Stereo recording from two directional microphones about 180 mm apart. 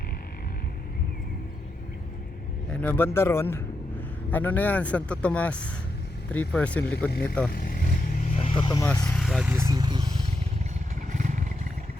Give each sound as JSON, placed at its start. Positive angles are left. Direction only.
{"t": 2.6, "sound": "speech", "side_deg": 5}
{"t": 7.5, "sound": "vehicle", "side_deg": 55}
{"t": 8.8, "sound": "speech", "side_deg": 10}
{"t": 9.5, "sound": "speech", "side_deg": -15}
{"t": 11.1, "sound": "vehicle", "side_deg": -45}